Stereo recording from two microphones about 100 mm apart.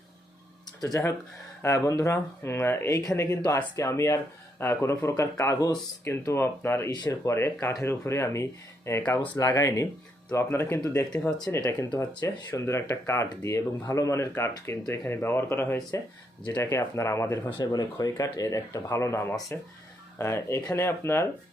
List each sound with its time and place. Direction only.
0.8 s speech: 35° left (ahead or behind)
6.9 s speech: 40° left (ahead or behind)
7.3 s speech: 25° left (ahead or behind)
17.6 s speech: 40° left (ahead or behind); by 21.2 s 25° left (ahead or behind)